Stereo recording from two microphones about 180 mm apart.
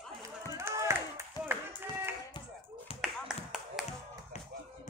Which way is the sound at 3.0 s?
5° right (ahead or behind).